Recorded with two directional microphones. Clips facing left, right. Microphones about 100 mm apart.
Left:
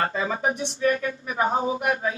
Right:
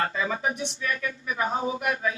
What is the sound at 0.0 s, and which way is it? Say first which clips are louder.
Speech: left 2 dB; 35° left (ahead or behind).